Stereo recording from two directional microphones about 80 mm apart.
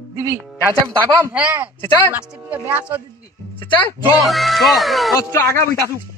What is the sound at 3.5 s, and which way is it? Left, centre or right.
Music, left.